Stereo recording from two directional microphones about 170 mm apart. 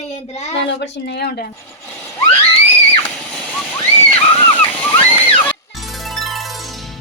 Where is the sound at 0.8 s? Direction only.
85° left.